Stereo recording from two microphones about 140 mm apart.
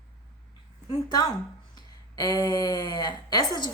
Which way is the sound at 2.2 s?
30° left (ahead or behind).